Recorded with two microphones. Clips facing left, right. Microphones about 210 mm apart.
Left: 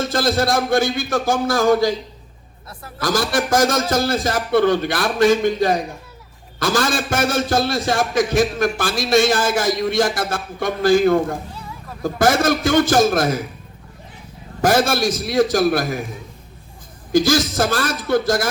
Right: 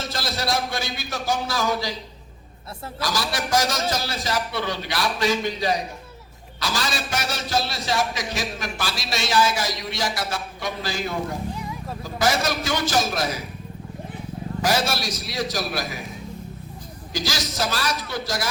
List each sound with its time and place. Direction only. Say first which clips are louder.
0.0 s a man's voice: left 10 dB; 50° left (ahead or behind)
3.0 s a man's voice: left 8 dB; 50° left (ahead or behind)
11.5 s a sound: right 3 dB; 15° right (ahead or behind)
12.0 s a man's voice: left 7 dB; 50° left (ahead or behind)
14.6 s a man's voice: left 8 dB; 50° left (ahead or behind)
17.1 s a man's voice: left 13 dB; 50° left (ahead or behind)